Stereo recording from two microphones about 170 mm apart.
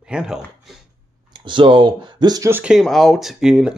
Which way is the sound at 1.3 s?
30° right (ahead or behind).